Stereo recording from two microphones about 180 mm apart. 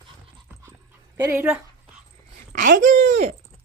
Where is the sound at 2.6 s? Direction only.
45° right (ahead or behind).